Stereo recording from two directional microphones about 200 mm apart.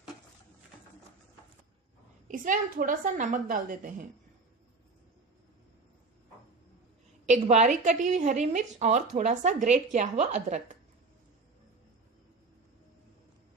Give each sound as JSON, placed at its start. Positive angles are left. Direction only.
{"t": 2.2, "sound": "a woman's voice", "side_deg": -40}
{"t": 7.2, "sound": "a woman's voice", "side_deg": -35}